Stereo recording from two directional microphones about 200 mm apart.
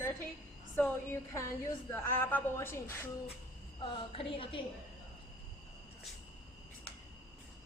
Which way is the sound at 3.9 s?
25° left (ahead or behind).